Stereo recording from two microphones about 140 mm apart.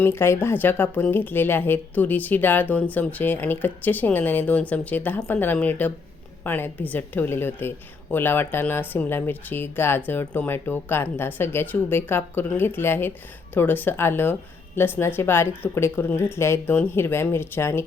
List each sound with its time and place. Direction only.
0.0 s speech: 15° left (ahead or behind)